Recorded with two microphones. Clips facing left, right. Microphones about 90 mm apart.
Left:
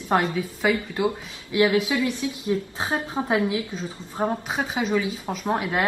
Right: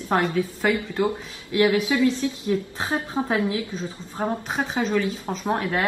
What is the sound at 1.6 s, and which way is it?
A woman's voice, 20° left (ahead or behind).